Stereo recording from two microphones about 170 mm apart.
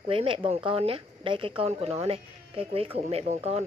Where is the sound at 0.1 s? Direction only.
30° right (ahead or behind).